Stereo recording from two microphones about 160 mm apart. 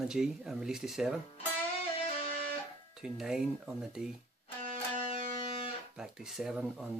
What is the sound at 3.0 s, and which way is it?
Speech, centre (ahead or behind).